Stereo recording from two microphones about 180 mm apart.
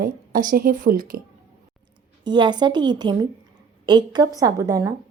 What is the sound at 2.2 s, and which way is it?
A woman's voice, 25° right (ahead or behind).